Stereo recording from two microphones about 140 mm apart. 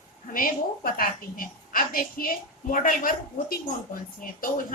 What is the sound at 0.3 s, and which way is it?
A woman's voice, 90° left.